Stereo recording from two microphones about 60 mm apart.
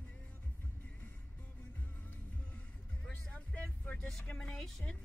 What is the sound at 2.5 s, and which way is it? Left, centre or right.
Music, left.